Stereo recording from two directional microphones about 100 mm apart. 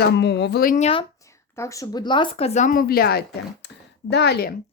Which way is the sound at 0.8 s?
70° left (ahead or behind).